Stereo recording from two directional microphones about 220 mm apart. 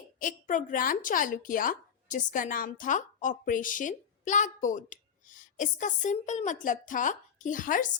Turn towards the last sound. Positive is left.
turn(degrees=35)  # may be behind; listen again after turning